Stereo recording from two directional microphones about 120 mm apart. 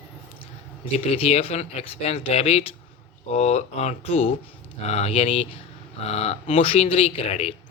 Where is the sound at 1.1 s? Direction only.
55° left (ahead or behind).